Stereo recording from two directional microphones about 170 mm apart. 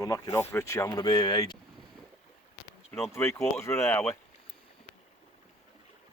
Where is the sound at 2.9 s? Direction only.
15° left (ahead or behind).